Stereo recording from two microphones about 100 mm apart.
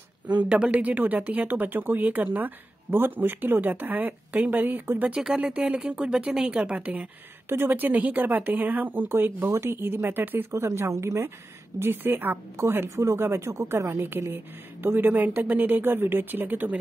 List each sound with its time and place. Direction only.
0.4 s speech: 15° right (ahead or behind)